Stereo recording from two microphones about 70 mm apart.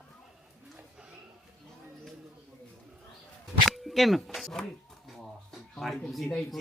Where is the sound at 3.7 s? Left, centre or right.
Centre.